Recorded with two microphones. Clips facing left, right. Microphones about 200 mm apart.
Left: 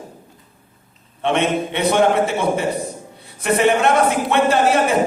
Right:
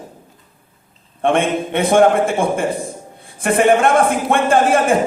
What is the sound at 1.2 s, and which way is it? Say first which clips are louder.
A man's voice: right 2 dB; 50° right (ahead or behind).